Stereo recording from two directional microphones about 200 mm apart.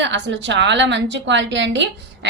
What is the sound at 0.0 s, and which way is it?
A woman's voice, 65° right (ahead or behind).